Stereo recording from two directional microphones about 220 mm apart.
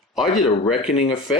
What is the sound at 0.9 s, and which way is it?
Speech, 25° left (ahead or behind).